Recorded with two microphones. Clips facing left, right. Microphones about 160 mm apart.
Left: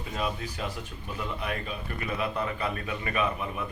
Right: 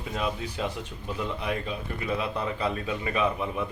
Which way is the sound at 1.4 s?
20° right (ahead or behind).